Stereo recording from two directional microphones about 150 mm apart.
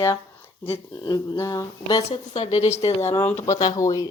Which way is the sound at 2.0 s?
45° left (ahead or behind).